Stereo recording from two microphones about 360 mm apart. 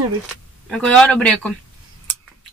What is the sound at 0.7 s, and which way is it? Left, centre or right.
Speech, centre.